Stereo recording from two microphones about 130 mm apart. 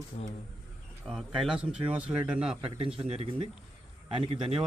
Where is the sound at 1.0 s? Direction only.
Centre (ahead or behind).